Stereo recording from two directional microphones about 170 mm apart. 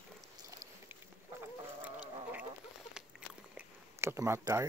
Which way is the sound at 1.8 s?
10° right (ahead or behind).